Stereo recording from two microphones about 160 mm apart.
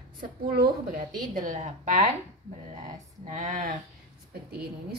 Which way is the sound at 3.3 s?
55° right (ahead or behind).